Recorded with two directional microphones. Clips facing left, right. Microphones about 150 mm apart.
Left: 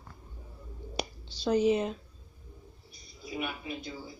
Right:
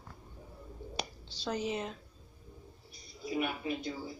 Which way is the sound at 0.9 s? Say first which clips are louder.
Left 6 dB; 15° left (ahead or behind).